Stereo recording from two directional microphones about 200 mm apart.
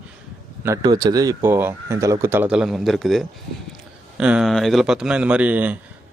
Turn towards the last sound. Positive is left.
turn(degrees=-10)  # may be behind; listen again after turning